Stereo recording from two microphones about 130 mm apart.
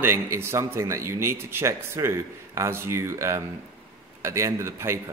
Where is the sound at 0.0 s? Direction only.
15° right (ahead or behind).